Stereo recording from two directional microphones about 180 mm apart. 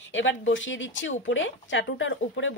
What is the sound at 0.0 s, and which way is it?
Speech, 90° left.